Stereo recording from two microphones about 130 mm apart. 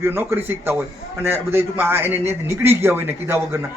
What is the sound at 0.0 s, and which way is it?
A man's voice, 15° right (ahead or behind).